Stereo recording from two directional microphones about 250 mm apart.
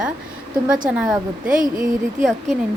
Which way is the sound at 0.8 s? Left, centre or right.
Centre.